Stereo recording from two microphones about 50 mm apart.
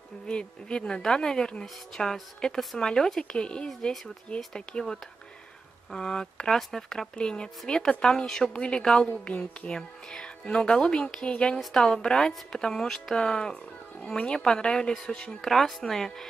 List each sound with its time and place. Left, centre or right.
0.3 s a woman's voice: centre
5.9 s a woman's voice: centre